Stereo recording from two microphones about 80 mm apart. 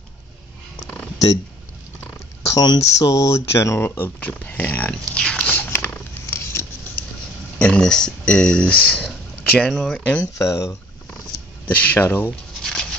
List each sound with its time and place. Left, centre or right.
2.5 s speech: left
3.1 s speech: left
5.2 s a sound: centre
5.5 s a sound: left
6.2 s patter: left
7.5 s speech: centre
9.6 s speech: centre
9.9 s speech: centre
10.3 s speech: left
11.6 s speech: centre